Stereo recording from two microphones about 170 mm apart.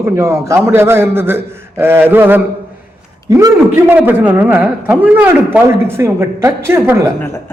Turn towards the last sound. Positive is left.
turn(degrees=-15)  # may be behind; listen again after turning